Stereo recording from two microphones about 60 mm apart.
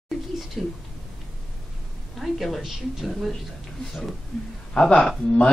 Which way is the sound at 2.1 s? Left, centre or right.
Centre.